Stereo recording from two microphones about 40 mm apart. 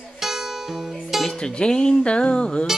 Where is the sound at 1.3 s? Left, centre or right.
Left.